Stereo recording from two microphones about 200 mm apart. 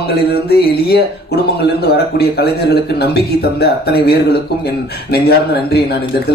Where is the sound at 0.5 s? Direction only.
55° left (ahead or behind).